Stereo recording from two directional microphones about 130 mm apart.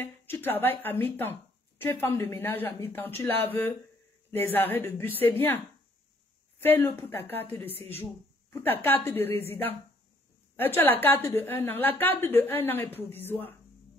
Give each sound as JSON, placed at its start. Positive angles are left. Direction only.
{"t": 0.0, "sound": "a woman's voice", "side_deg": 15}
{"t": 6.6, "sound": "a woman's voice", "side_deg": 15}